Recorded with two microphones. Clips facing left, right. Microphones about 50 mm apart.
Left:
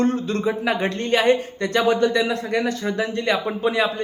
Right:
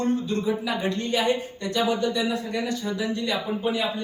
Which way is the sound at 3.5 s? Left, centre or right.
Left.